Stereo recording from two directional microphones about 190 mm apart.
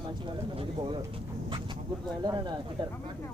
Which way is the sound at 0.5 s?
25° right (ahead or behind).